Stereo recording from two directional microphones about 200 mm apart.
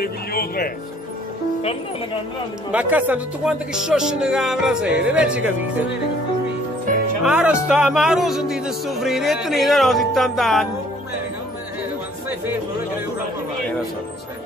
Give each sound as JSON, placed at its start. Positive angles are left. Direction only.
{"t": 0.0, "sound": "speech", "side_deg": 50}
{"t": 2.7, "sound": "speech", "side_deg": -5}
{"t": 7.2, "sound": "speech", "side_deg": -5}